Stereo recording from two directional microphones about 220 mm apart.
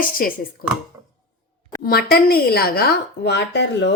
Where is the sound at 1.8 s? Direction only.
45° left (ahead or behind).